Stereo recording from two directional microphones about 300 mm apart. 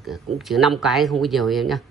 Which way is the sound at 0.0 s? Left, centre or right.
Centre.